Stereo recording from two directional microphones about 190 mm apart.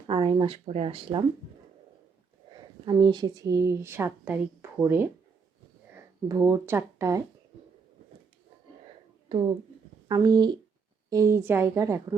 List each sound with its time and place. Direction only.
0.1 s speech: 25° right (ahead or behind)
2.8 s speech: 25° right (ahead or behind)
10.1 s speech: 20° right (ahead or behind)